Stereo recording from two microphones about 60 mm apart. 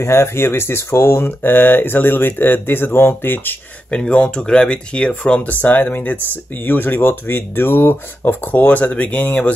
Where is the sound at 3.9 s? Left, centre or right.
Centre.